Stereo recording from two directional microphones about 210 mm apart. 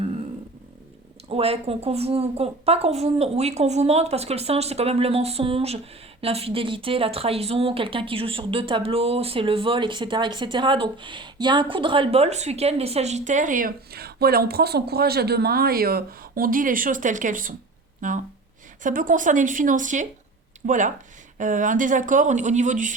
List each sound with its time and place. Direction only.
1.3 s speech: 30° right (ahead or behind)